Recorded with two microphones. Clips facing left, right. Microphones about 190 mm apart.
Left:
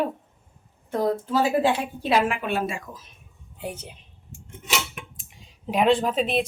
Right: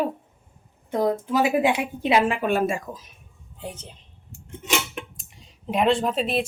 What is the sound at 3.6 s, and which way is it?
Speech, 10° left (ahead or behind).